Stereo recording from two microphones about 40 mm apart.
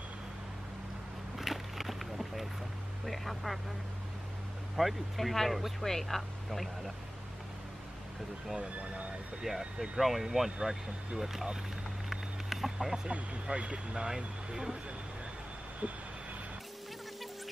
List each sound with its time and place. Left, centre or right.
1.4 s a sound: centre
3.1 s vehicle: centre
4.7 s speech: centre
8.5 s speech: right
9.4 s speech: centre
12.1 s a sound: centre
12.7 s speech: centre
13.0 s speech: right
15.8 s speech: right